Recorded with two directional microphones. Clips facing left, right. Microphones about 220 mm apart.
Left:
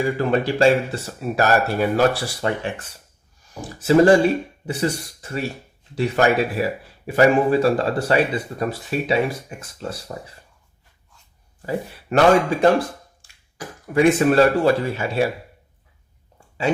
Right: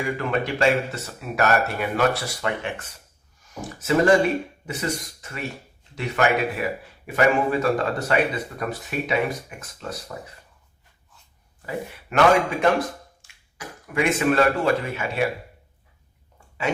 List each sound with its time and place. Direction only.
0.0 s speech: 35° left (ahead or behind)
11.6 s speech: 35° left (ahead or behind)
13.2 s cough: 30° left (ahead or behind)
13.6 s speech: 35° left (ahead or behind)